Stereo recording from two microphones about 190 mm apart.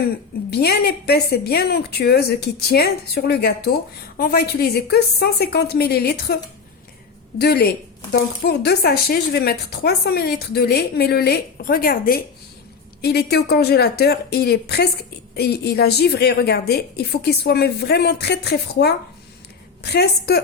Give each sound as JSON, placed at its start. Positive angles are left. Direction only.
{"t": 0.5, "sound": "speech", "side_deg": 55}
{"t": 7.3, "sound": "speech", "side_deg": 55}